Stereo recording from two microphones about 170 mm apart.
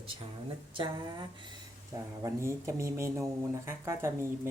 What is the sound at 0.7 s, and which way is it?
Speech, 25° right (ahead or behind).